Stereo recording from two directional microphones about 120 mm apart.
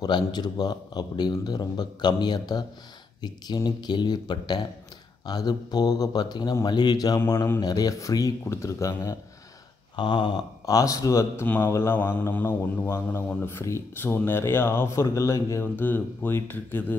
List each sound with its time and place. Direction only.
0.0 s a man's voice: 35° left (ahead or behind)
7.2 s speech: 25° left (ahead or behind)
9.9 s speech: 40° left (ahead or behind)
11.4 s speech: 15° left (ahead or behind)